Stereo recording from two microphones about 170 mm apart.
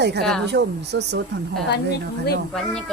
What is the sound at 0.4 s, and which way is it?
Speech, 85° right.